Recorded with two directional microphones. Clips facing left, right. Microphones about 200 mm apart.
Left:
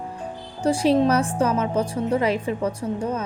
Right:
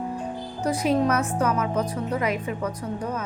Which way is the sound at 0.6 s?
30° left (ahead or behind).